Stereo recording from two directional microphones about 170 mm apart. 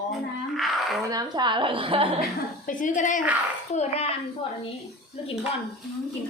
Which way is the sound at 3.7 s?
40° left (ahead or behind).